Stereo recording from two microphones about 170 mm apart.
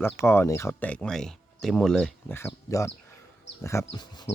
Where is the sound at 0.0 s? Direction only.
15° left (ahead or behind).